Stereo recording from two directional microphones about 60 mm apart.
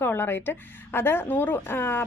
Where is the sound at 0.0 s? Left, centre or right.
Left.